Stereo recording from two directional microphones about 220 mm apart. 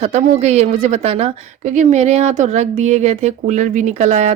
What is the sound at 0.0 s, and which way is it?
A woman's voice, 30° right (ahead or behind).